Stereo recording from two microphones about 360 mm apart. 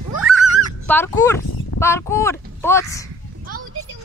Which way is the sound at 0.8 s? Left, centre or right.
Centre.